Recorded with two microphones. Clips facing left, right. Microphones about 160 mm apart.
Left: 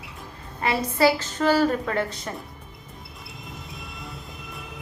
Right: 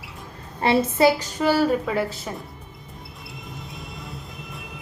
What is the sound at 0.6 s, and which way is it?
Speech, 25° right (ahead or behind).